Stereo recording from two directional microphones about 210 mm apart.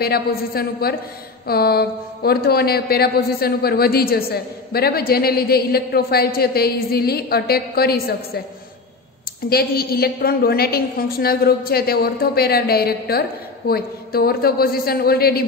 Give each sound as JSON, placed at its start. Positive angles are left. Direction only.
{"t": 0.0, "sound": "speech", "side_deg": 45}
{"t": 9.5, "sound": "speech", "side_deg": 45}